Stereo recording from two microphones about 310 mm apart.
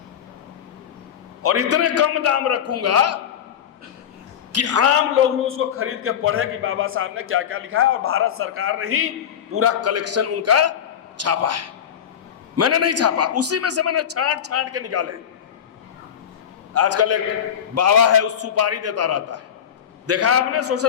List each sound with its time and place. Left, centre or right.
1.4 s a man's voice: right
4.5 s a man's voice: right
16.7 s a man's voice: right